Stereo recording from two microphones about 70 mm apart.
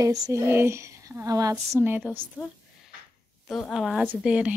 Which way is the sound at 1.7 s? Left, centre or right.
Right.